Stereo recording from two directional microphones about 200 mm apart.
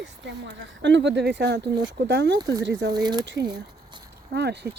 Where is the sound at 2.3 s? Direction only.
20° right (ahead or behind).